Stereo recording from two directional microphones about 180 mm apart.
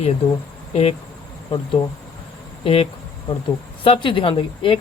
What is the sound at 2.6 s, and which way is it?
Speech, 30° left (ahead or behind).